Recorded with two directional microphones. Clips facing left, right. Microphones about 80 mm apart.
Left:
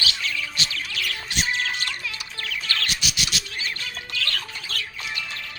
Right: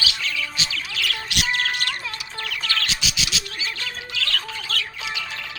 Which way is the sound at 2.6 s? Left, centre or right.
Right.